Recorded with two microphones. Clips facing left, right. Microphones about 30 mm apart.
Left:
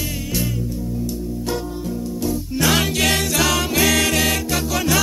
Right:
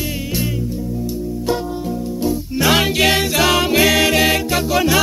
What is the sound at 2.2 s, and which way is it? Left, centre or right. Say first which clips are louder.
Music: right 3 dB; centre.